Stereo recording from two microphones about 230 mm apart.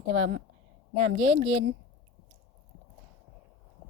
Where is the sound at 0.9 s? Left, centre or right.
Right.